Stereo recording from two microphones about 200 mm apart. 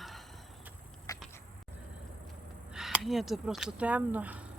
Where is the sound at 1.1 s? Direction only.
15° left (ahead or behind).